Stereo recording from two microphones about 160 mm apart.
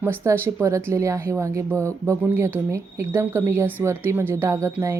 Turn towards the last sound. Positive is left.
turn(degrees=-15)  # may be behind; listen again after turning